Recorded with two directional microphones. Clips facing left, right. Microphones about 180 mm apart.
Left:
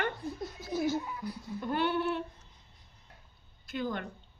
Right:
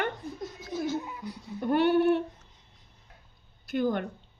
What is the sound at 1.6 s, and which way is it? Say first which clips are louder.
Speech: right 8 dB; 55° right (ahead or behind).